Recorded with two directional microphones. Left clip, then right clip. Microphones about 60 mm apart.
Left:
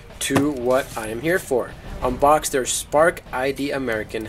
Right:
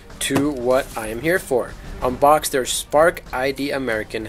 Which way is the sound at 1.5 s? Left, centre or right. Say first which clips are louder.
Right 1 dB; right.